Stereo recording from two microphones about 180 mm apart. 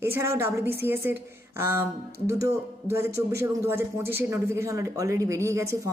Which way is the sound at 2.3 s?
15° right (ahead or behind).